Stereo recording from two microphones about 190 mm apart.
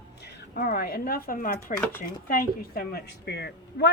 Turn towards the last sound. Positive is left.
turn(degrees=60)  # may be behind; listen again after turning